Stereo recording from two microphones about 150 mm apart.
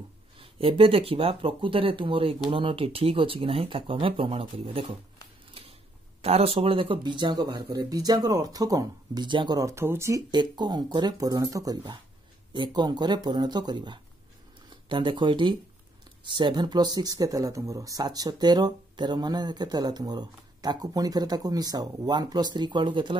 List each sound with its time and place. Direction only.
0.4 s speech: 35° right (ahead or behind)
6.2 s speech: 40° right (ahead or behind)